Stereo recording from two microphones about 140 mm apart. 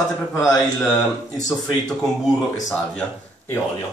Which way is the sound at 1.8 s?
Centre (ahead or behind).